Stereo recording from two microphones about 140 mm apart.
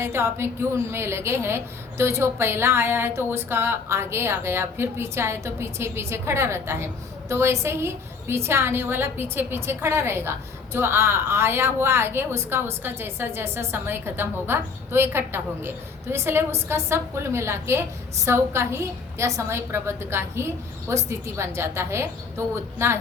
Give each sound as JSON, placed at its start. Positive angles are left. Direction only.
{"t": 0.0, "sound": "a woman's voice", "side_deg": -15}